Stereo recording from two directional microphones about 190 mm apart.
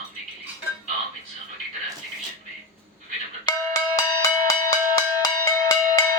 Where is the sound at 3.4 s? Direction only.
20° left (ahead or behind).